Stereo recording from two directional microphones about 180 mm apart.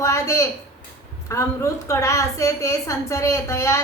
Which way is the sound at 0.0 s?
15° left (ahead or behind).